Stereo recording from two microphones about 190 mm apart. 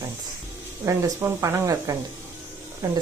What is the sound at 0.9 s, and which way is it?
Speech, 15° right (ahead or behind).